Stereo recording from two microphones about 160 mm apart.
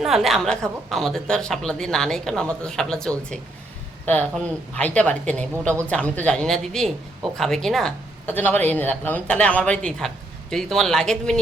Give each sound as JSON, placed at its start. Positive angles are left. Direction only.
{"t": 0.0, "sound": "speech", "side_deg": 0}